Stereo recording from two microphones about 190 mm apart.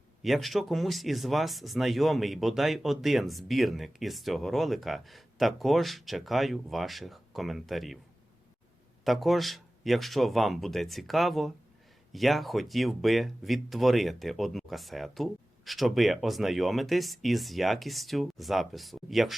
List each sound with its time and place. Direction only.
0.2 s speech: centre (ahead or behind)
9.0 s speech: centre (ahead or behind)